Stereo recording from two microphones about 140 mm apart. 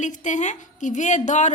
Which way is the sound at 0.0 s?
60° left (ahead or behind).